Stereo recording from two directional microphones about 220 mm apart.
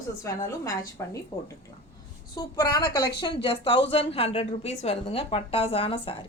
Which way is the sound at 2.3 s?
15° left (ahead or behind).